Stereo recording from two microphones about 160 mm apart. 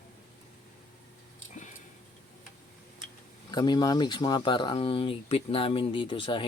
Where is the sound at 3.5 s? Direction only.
25° left (ahead or behind).